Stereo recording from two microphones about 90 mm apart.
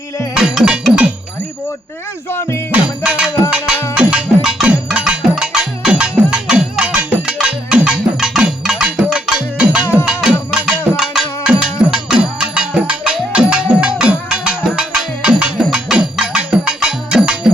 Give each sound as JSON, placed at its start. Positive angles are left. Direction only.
{"t": 0.3, "sound": "music", "side_deg": -5}
{"t": 2.3, "sound": "music", "side_deg": 25}
{"t": 3.0, "sound": "music", "side_deg": -10}
{"t": 4.4, "sound": "cowbell", "side_deg": 0}
{"t": 4.9, "sound": "cowbell", "side_deg": -10}
{"t": 5.3, "sound": "music", "side_deg": -5}